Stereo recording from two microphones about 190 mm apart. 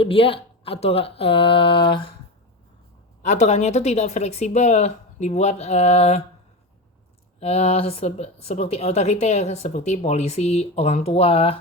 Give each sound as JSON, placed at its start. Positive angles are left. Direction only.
{"t": 0.0, "sound": "speech", "side_deg": 30}
{"t": 3.2, "sound": "a woman's voice", "side_deg": 35}
{"t": 7.3, "sound": "a woman's voice", "side_deg": 30}